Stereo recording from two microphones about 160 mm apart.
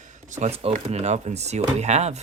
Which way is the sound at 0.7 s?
45° right (ahead or behind).